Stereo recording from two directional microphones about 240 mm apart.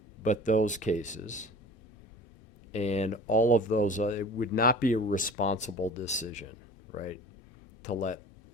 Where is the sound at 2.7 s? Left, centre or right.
Left.